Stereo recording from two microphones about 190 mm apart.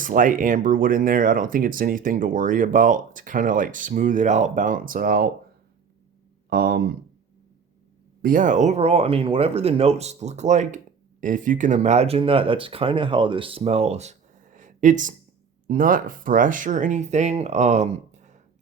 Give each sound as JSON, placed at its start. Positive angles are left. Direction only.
{"t": 0.0, "sound": "speech", "side_deg": -45}
{"t": 6.5, "sound": "speech", "side_deg": -55}
{"t": 8.2, "sound": "speech", "side_deg": -45}